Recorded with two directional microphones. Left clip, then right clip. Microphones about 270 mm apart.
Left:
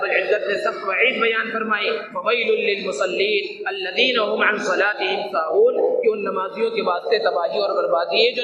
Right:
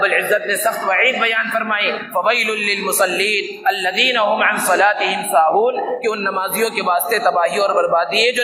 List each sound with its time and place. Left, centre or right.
0.6 s a man's voice: right